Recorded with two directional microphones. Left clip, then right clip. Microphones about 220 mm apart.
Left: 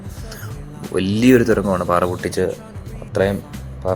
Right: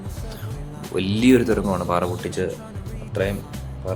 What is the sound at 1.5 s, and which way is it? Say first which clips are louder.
Speech: left 5 dB; centre (ahead or behind).